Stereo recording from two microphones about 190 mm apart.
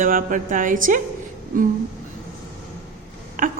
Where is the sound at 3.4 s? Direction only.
45° right (ahead or behind).